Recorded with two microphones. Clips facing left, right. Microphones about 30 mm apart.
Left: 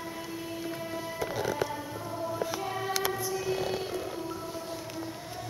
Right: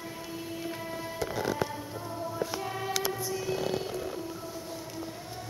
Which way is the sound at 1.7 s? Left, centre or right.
Centre.